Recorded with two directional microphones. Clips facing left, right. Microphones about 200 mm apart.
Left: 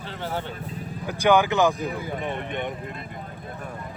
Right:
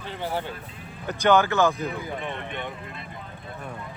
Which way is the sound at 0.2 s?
10° right (ahead or behind).